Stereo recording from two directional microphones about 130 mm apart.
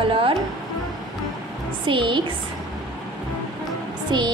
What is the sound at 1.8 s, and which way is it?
Speech, 40° right (ahead or behind).